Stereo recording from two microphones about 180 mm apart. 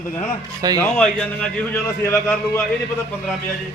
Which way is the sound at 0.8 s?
5° left (ahead or behind).